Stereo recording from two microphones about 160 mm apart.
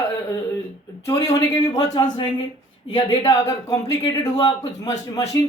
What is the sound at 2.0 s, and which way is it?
A man's voice, 30° left (ahead or behind).